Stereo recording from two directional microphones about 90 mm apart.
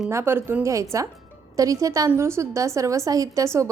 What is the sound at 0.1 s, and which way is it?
A woman's voice, 30° right (ahead or behind).